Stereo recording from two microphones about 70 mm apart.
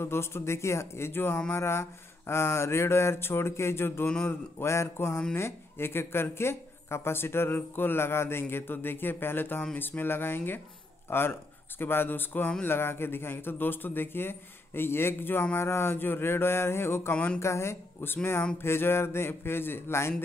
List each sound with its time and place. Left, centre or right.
0.0 s speech: left
17.1 s speech: left
17.4 s speech: left